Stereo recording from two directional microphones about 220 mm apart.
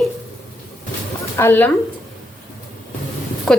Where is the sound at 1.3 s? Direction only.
10° left (ahead or behind).